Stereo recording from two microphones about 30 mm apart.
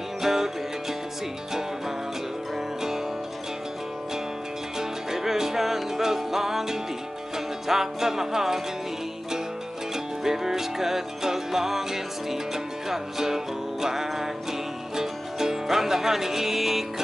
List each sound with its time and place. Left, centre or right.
0.2 s music: centre
4.7 s music: centre
10.2 s music: centre